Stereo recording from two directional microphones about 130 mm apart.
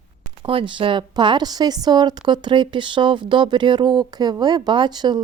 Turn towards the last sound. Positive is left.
turn(degrees=-35)  # may be behind; listen again after turning